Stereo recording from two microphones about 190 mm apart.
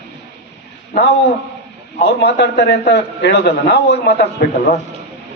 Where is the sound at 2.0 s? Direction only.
60° left (ahead or behind).